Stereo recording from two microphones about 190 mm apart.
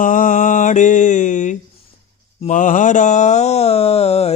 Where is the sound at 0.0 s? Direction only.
45° left (ahead or behind).